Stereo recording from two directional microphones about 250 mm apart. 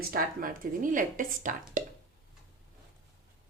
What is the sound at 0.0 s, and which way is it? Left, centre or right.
Speech, right.